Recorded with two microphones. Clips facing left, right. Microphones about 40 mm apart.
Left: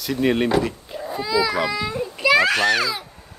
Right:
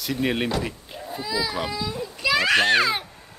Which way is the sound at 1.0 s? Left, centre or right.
Left.